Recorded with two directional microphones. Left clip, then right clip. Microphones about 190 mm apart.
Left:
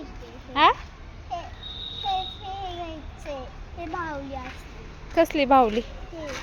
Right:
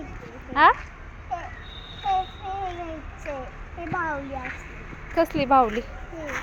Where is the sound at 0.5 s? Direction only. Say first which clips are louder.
Right 2 dB; 20° left (ahead or behind).